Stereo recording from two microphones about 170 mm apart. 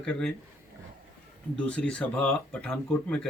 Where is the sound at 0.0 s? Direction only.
5° left (ahead or behind).